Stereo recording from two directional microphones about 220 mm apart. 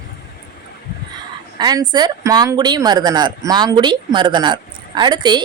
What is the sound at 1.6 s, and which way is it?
Speech, 20° right (ahead or behind).